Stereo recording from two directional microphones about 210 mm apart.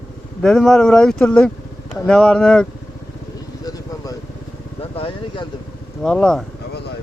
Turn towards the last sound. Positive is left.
turn(degrees=5)  # may be behind; listen again after turning